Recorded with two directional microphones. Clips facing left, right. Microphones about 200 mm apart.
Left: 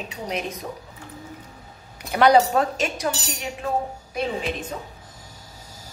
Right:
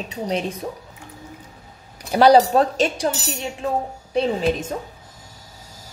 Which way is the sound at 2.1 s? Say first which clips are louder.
Right 3 dB; 30° right (ahead or behind).